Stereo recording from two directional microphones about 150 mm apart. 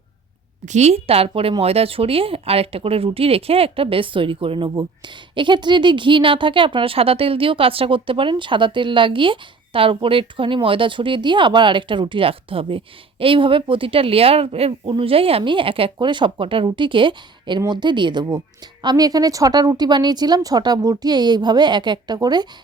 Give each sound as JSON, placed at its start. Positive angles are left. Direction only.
{"t": 0.6, "sound": "a woman's voice", "side_deg": -50}